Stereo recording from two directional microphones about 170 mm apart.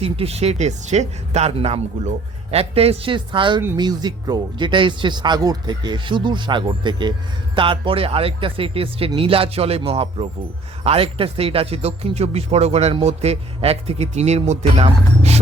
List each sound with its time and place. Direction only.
0.0 s speech: 35° right (ahead or behind)